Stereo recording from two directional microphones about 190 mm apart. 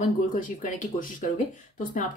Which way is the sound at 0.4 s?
45° left (ahead or behind).